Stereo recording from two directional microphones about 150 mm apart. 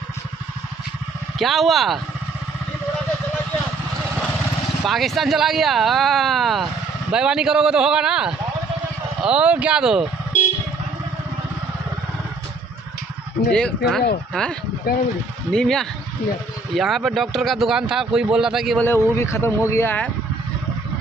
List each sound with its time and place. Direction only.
1.4 s speech: centre (ahead or behind)
4.8 s speech: centre (ahead or behind)
13.5 s speech: 5° left (ahead or behind)
14.9 s speech: 90° left
15.5 s speech: 5° left (ahead or behind)
18.8 s speech: 15° left (ahead or behind)